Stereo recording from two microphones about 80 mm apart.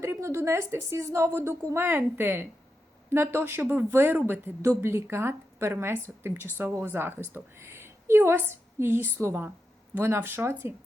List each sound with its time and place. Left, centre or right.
0.0 s a woman's voice: right